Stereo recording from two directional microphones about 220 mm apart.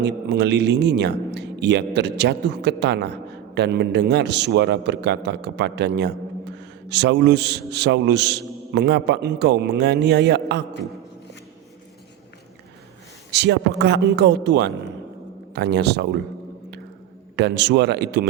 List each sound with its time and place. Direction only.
0.0 s a man's voice: 50° right (ahead or behind)
13.3 s a man's voice: 50° right (ahead or behind)
17.3 s a man's voice: 50° right (ahead or behind)